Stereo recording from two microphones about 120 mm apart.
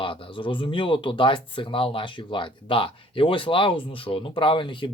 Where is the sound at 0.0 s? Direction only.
45° left (ahead or behind).